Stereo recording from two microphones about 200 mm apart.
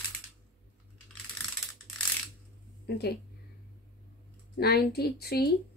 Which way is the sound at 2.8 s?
55° left (ahead or behind).